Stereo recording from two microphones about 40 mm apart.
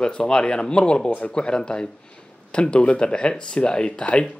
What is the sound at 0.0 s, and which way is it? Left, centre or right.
A man's voice, left.